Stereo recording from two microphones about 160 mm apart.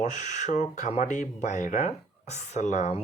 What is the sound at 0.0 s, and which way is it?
Speech, 50° left (ahead or behind).